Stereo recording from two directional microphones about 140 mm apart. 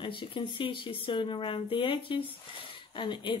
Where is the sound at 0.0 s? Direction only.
35° left (ahead or behind).